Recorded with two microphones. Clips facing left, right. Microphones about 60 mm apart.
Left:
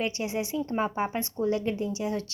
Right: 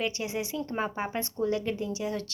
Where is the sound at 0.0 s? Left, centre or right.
Left.